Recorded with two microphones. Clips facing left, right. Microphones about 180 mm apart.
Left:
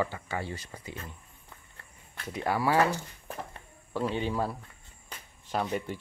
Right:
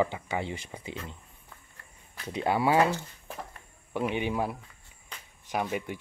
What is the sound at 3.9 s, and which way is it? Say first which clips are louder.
Speech: right 1 dB; 15° right (ahead or behind).